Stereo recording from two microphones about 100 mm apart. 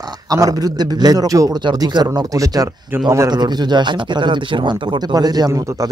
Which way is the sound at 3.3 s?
45° right (ahead or behind).